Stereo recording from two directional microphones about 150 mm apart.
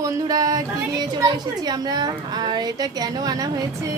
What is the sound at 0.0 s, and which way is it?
A woman's voice, 25° right (ahead or behind).